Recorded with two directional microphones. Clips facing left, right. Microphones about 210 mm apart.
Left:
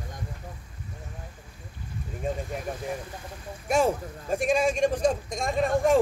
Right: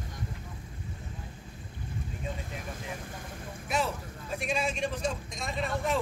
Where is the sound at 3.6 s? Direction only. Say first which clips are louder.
Left 8 dB; 45° left (ahead or behind).